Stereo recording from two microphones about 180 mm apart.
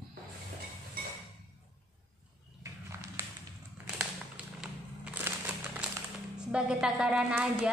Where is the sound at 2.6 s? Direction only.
15° right (ahead or behind).